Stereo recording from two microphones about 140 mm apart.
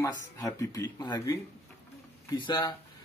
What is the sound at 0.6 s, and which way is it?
Speech, 25° left (ahead or behind).